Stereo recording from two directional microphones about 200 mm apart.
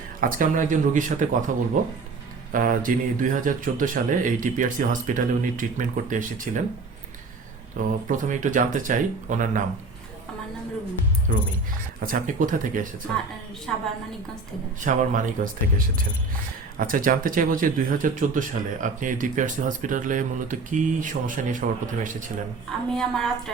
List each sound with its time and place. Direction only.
0.2 s speech: 45° right (ahead or behind)
2.5 s speech: 45° right (ahead or behind)
7.9 s speech: 40° right (ahead or behind)
11.3 s speech: 40° right (ahead or behind)
13.7 s a woman's voice: 5° left (ahead or behind)
14.8 s speech: 40° right (ahead or behind)
16.7 s speech: 45° right (ahead or behind)
22.9 s a woman's voice: 5° left (ahead or behind)